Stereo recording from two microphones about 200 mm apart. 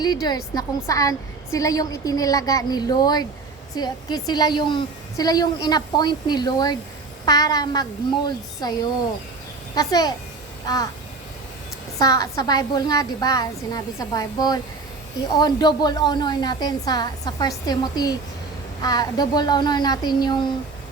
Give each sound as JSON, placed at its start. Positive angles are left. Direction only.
{"t": 0.0, "sound": "a woman's voice", "side_deg": 20}
{"t": 11.9, "sound": "a woman's voice", "side_deg": 15}